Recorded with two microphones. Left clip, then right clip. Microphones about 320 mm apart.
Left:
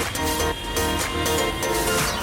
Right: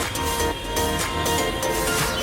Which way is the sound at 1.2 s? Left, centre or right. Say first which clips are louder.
Even; centre.